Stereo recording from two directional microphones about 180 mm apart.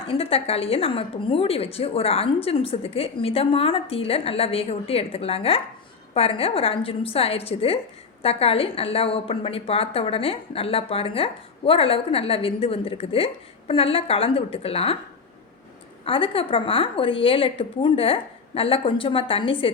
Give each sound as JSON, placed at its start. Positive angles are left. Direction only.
{"t": 0.0, "sound": "a woman's voice", "side_deg": 30}
{"t": 16.0, "sound": "a woman's voice", "side_deg": 30}